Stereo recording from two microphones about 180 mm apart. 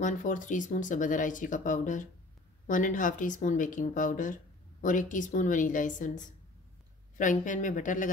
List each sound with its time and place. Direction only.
0.0 s speech: 45° left (ahead or behind)